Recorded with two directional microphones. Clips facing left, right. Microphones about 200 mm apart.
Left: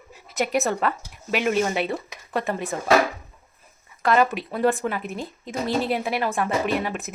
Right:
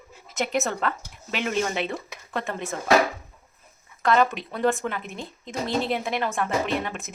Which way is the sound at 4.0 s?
5° left (ahead or behind).